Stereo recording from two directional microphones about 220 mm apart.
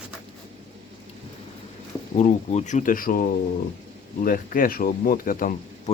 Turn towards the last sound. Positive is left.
turn(degrees=40)  # may be behind; listen again after turning